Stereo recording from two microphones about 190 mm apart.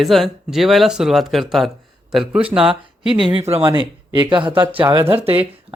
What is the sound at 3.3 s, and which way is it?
Speech, 30° right (ahead or behind).